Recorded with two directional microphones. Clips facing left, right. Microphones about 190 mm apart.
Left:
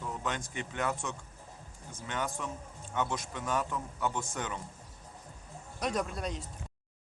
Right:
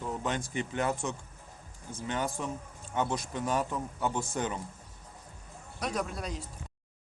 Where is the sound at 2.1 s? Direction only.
30° right (ahead or behind).